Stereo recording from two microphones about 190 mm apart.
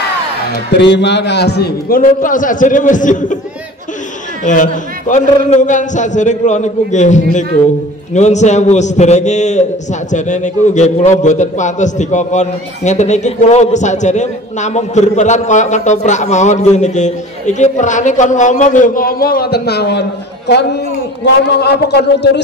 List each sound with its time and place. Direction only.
0.7 s a man's voice: 65° left (ahead or behind); by 3.3 s 40° left (ahead or behind)
4.5 s a man's voice: 40° left (ahead or behind); by 22.4 s 60° left (ahead or behind)